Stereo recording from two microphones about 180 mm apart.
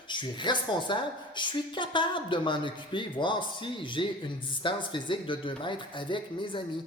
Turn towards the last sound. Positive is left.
turn(degrees=25)  # may be behind; listen again after turning